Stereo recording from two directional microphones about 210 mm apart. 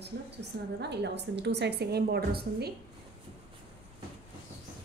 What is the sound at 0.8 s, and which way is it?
A woman's voice, 55° right (ahead or behind).